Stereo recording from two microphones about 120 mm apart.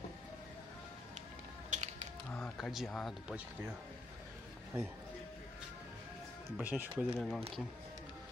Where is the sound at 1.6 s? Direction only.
75° right (ahead or behind).